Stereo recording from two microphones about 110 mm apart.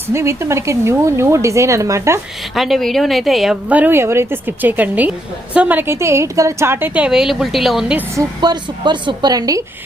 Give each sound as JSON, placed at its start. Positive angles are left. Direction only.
{"t": 0.1, "sound": "speech", "side_deg": -25}
{"t": 2.6, "sound": "a woman's voice", "side_deg": 0}
{"t": 3.7, "sound": "a woman's voice", "side_deg": -15}
{"t": 8.4, "sound": "a woman's voice", "side_deg": -45}